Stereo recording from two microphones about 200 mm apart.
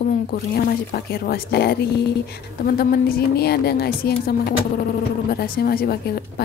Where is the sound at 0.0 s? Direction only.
50° left (ahead or behind).